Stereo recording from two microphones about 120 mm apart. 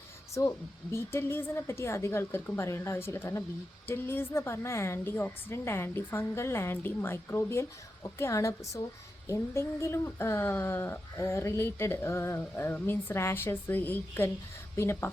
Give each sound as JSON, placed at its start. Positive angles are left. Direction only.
{"t": 0.3, "sound": "speech", "side_deg": 25}